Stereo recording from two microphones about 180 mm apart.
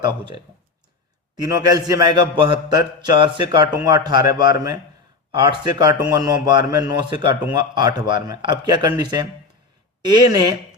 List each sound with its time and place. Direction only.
1.4 s a man's voice: 20° right (ahead or behind)